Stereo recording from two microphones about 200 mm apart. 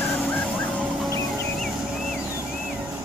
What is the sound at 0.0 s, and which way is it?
Music, 5° left (ahead or behind).